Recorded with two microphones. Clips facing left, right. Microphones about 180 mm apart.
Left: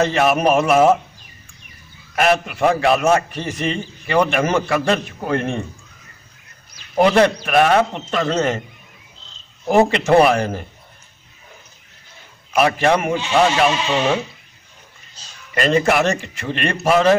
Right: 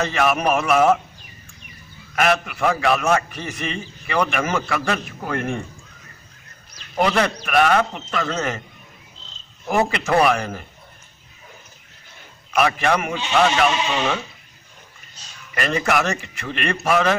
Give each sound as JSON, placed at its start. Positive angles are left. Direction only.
{"t": 0.0, "sound": "a man's voice", "side_deg": 30}
{"t": 2.1, "sound": "a man's voice", "side_deg": 30}
{"t": 7.0, "sound": "a man's voice", "side_deg": 30}
{"t": 9.7, "sound": "a man's voice", "side_deg": 30}
{"t": 12.5, "sound": "a man's voice", "side_deg": 30}
{"t": 15.5, "sound": "a man's voice", "side_deg": 30}